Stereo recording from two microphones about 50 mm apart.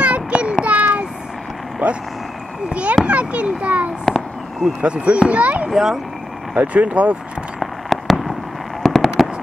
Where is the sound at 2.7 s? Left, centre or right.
Right.